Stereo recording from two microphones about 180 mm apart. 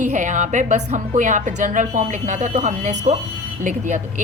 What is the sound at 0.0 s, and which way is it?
A woman's voice, 45° right (ahead or behind).